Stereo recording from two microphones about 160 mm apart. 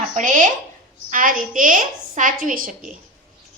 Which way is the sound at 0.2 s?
55° right (ahead or behind).